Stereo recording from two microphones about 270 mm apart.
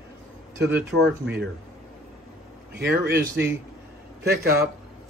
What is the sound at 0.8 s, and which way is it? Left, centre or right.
Speech, right.